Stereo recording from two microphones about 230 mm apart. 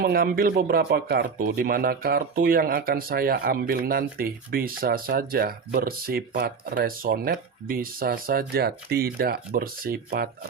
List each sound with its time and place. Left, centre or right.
0.0 s speech: right